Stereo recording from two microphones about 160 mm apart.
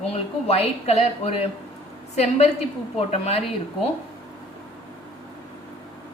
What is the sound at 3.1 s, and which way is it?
Speech, 40° left (ahead or behind).